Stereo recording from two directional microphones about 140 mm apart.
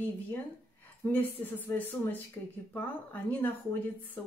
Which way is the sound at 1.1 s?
15° left (ahead or behind).